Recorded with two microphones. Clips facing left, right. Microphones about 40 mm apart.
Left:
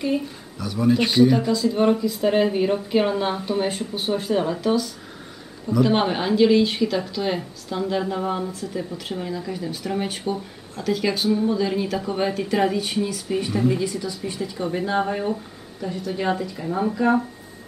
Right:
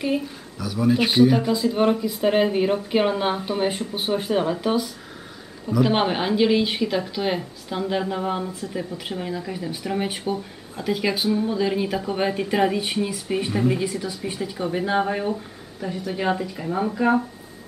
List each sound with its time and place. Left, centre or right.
0.6 s speech: centre
1.0 s speech: centre
7.3 s speech: centre
12.7 s speech: right